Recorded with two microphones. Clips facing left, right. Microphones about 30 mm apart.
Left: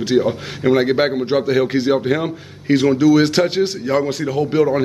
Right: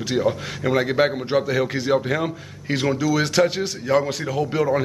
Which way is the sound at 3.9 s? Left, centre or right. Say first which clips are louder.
Left 2 dB; centre.